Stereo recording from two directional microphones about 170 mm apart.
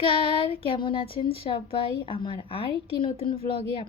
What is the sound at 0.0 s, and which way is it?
Speech, 35° left (ahead or behind).